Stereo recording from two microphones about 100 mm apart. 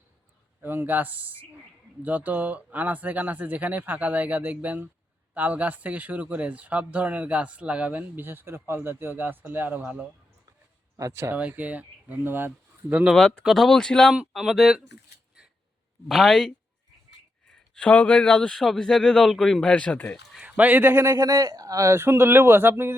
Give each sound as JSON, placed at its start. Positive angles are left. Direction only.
{"t": 0.6, "sound": "a man's voice", "side_deg": -20}
{"t": 10.9, "sound": "a man's voice", "side_deg": -30}
{"t": 11.3, "sound": "speech", "side_deg": -15}
{"t": 13.1, "sound": "speech", "side_deg": 5}
{"t": 14.1, "sound": "speech", "side_deg": -5}
{"t": 16.0, "sound": "speech", "side_deg": 0}
{"t": 17.7, "sound": "speech", "side_deg": 15}
{"t": 20.4, "sound": "a man's voice", "side_deg": -15}